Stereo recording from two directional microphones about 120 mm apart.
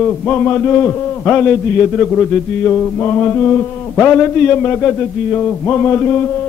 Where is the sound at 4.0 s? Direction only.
15° left (ahead or behind).